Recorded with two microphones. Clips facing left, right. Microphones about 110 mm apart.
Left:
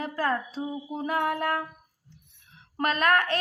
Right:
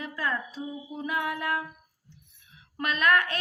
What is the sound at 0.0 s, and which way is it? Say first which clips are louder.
Female singing: left 4 dB; 35° left (ahead or behind).